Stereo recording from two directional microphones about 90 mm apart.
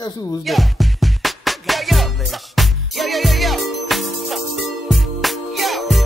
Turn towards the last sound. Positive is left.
turn(degrees=0)  # may be behind; listen again after turning